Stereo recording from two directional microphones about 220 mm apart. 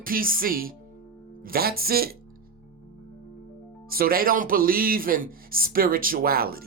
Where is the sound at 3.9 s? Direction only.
40° right (ahead or behind).